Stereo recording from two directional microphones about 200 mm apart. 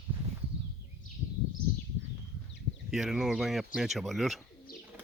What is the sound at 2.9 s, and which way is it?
Speech, 5° right (ahead or behind).